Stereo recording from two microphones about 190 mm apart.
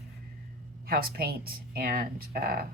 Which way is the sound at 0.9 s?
50° right (ahead or behind).